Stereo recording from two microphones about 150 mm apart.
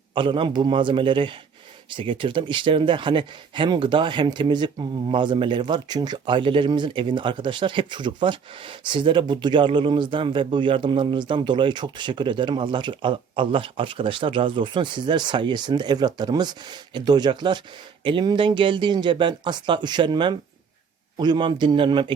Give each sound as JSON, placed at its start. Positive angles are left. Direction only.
{"t": 0.1, "sound": "speech", "side_deg": -35}